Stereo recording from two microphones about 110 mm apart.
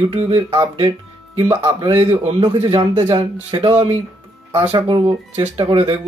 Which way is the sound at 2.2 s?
45° right (ahead or behind).